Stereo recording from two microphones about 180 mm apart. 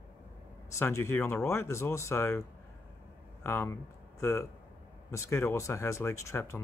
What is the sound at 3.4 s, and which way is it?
Speech, 15° left (ahead or behind).